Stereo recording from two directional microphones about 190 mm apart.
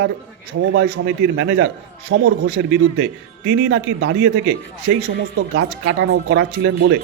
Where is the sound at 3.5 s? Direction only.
70° right (ahead or behind).